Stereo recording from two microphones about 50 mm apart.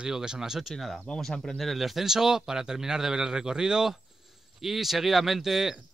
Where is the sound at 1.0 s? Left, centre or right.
Centre.